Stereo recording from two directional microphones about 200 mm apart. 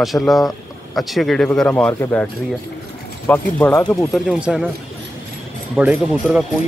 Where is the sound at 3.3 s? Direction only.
10° left (ahead or behind).